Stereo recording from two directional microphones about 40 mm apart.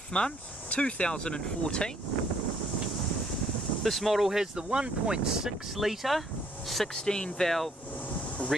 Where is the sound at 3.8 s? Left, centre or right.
Centre.